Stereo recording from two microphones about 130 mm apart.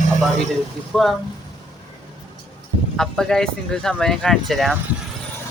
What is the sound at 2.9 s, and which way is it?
Speech, 5° left (ahead or behind).